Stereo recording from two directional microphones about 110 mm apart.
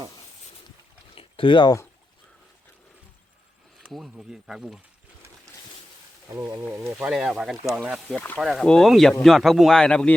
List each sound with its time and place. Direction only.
1.1 s boat: 50° left (ahead or behind)
3.8 s speech: centre (ahead or behind)
6.3 s speech: 30° right (ahead or behind)
6.7 s speech: 20° right (ahead or behind)
7.1 s speech: 5° right (ahead or behind)
8.0 s speech: 15° left (ahead or behind)
8.4 s speech: centre (ahead or behind)